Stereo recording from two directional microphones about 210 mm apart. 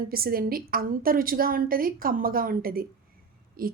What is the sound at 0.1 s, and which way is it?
A woman's voice, 45° right (ahead or behind).